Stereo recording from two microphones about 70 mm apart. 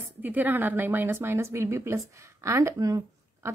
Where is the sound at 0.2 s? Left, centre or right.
Right.